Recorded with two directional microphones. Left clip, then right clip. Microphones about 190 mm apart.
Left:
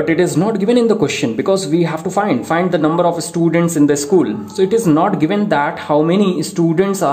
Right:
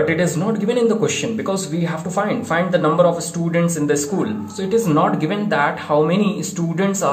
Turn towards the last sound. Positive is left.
turn(degrees=35)  # may be behind; listen again after turning